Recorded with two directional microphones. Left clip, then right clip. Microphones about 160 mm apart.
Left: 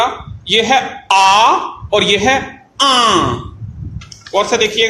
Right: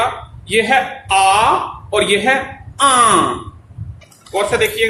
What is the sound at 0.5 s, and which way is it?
A man's voice, 35° left (ahead or behind).